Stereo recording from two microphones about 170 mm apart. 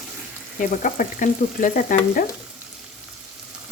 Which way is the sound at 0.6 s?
50° left (ahead or behind).